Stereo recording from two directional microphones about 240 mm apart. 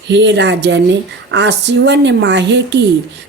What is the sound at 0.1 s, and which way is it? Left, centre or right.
Speech, right.